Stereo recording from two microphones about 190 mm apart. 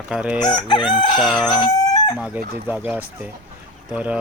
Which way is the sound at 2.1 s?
5° right (ahead or behind).